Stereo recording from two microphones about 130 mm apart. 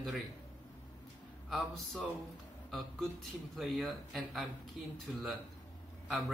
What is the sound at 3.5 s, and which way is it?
A man's voice, centre (ahead or behind).